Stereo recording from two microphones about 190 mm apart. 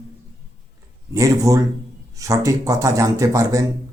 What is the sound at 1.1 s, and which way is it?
Speech, 15° right (ahead or behind).